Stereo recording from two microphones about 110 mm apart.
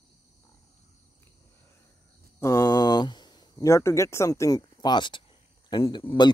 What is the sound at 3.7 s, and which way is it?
Speech, 25° left (ahead or behind).